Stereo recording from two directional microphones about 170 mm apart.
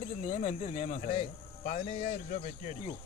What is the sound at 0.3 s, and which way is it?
Speech, 40° left (ahead or behind).